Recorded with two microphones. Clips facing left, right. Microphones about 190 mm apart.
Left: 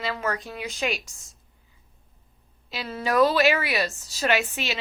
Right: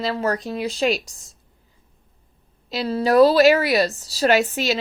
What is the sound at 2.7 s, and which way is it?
A woman's voice, 35° right (ahead or behind).